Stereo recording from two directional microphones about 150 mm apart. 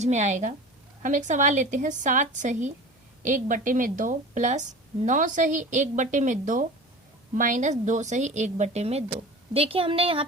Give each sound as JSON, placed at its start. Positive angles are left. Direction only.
{"t": 0.0, "sound": "a woman's voice", "side_deg": -50}